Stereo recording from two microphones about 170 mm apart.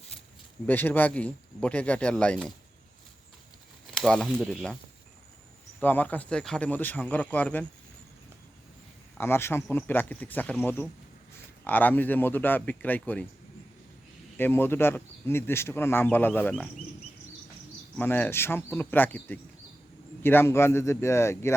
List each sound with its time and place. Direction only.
0.7 s speech: 10° left (ahead or behind)
3.9 s speech: 5° left (ahead or behind)
5.8 s speech: 10° left (ahead or behind)
9.1 s speech: 15° left (ahead or behind)
14.3 s speech: 10° left (ahead or behind)
17.9 s speech: 10° left (ahead or behind)